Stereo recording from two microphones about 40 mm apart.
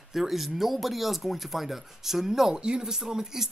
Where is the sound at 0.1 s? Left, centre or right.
Centre.